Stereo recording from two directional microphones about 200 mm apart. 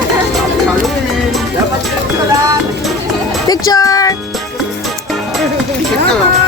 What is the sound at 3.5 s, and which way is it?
Music, 20° left (ahead or behind).